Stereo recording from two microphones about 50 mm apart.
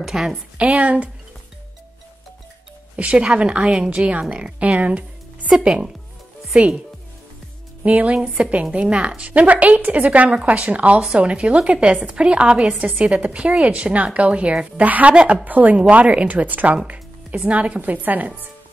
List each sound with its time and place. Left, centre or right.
0.0 s a woman's voice: centre
0.6 s speech: right
3.0 s a woman's voice: right
5.6 s a woman's voice: centre
7.8 s speech: right